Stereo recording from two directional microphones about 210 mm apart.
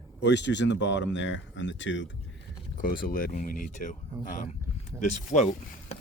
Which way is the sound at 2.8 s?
40° left (ahead or behind).